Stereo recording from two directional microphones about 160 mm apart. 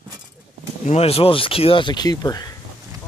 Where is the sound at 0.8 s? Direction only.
40° left (ahead or behind); by 2.5 s 25° left (ahead or behind).